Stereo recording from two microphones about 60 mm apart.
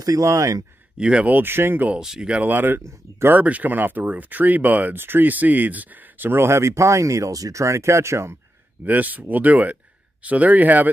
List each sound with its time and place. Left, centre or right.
0.0 s speech: right
0.9 s speech: centre
1.3 s speech: right
2.0 s speech: centre
2.4 s speech: right
2.9 s speech: right
3.3 s speech: right
8.8 s speech: right